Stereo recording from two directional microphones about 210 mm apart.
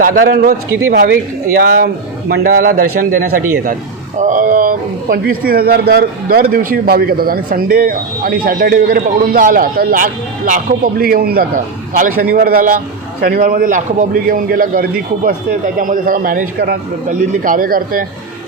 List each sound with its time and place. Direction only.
0.0 s a man's voice: 40° right (ahead or behind)